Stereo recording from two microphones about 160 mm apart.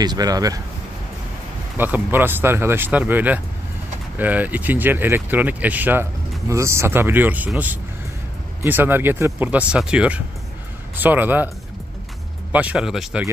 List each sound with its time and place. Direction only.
0.0 s speech: 25° right (ahead or behind)
1.8 s speech: 10° right (ahead or behind)
12.5 s speech: 5° right (ahead or behind)